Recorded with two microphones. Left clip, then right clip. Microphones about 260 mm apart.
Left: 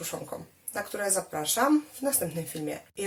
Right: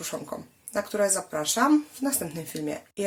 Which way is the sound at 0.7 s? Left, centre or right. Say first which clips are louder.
Right 5 dB; right.